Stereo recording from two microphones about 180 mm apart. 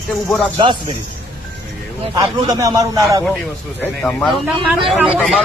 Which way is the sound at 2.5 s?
20° right (ahead or behind).